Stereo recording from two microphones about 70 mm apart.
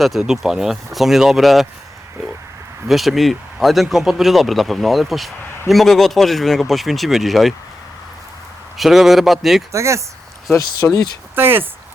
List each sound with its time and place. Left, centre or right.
0.0 s speech: centre
2.8 s speech: centre
8.8 s speech: centre
9.7 s speech: right
10.9 s speech: left
11.3 s speech: right